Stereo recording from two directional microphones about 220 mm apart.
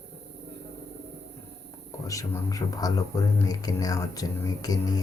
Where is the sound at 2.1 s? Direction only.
15° left (ahead or behind).